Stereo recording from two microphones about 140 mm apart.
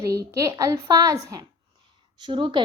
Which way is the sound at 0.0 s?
25° right (ahead or behind).